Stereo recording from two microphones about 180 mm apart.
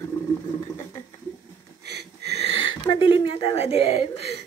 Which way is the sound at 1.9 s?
65° right (ahead or behind).